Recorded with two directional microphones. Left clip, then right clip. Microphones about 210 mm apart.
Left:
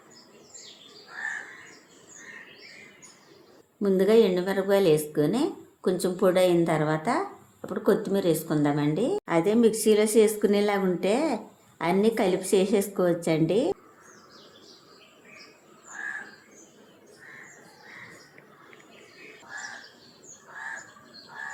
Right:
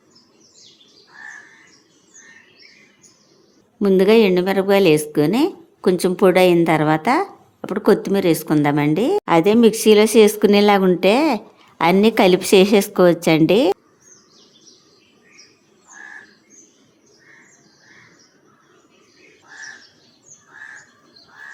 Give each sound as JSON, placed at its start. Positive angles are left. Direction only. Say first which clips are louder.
{"t": 3.8, "sound": "a woman's voice", "louder": "right 7 dB", "side_deg": -45}